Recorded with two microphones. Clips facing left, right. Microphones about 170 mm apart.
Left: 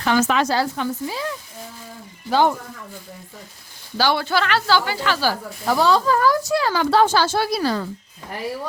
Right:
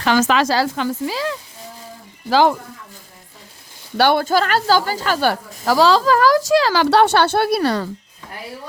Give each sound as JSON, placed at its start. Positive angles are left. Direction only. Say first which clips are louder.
{"t": 0.0, "sound": "a woman's voice", "louder": "right 2 dB", "side_deg": -90}
{"t": 3.9, "sound": "a woman's voice", "louder": "right 5 dB", "side_deg": -55}
{"t": 5.3, "sound": "speech", "louder": "right 3 dB", "side_deg": -90}